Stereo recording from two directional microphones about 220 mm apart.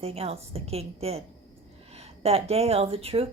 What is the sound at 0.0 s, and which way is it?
Speech, 25° right (ahead or behind).